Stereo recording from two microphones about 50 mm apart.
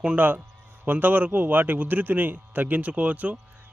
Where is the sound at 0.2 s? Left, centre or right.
Right.